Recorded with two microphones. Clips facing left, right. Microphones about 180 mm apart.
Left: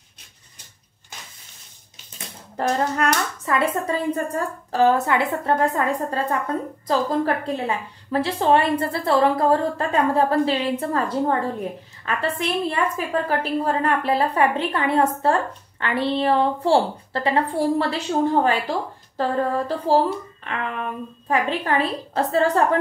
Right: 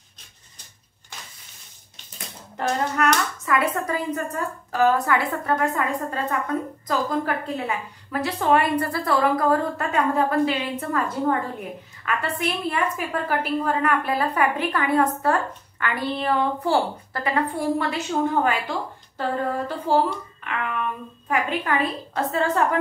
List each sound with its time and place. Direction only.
2.5 s speech: 35° left (ahead or behind)